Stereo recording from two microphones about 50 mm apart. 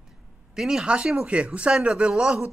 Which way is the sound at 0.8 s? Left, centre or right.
Right.